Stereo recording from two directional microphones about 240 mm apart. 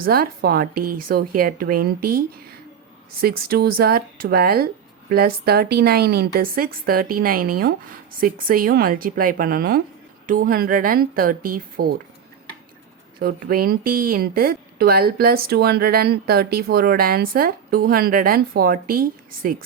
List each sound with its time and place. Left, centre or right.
0.0 s speech: right
13.1 s speech: right